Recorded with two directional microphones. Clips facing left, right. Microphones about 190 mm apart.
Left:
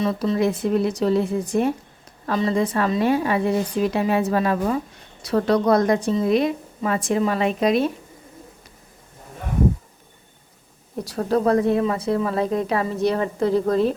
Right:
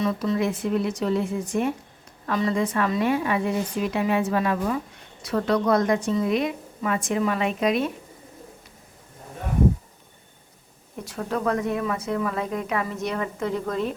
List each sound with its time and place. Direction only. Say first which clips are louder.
0.0 s a woman's voice: left 3 dB; 30° left (ahead or behind)
10.9 s a woman's voice: left 7 dB; 35° left (ahead or behind)